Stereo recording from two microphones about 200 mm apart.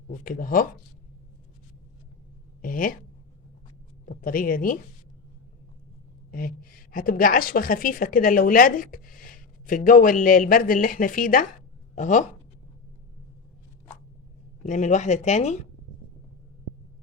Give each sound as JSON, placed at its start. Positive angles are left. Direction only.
{"t": 0.1, "sound": "a woman's voice", "side_deg": 45}
{"t": 2.6, "sound": "speech", "side_deg": 45}
{"t": 4.0, "sound": "a woman's voice", "side_deg": 45}
{"t": 6.3, "sound": "a woman's voice", "side_deg": 45}
{"t": 14.7, "sound": "speech", "side_deg": 40}